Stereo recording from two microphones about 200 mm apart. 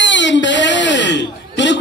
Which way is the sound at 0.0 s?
60° left (ahead or behind).